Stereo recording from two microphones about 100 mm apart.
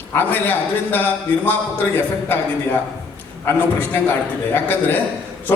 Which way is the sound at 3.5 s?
20° left (ahead or behind).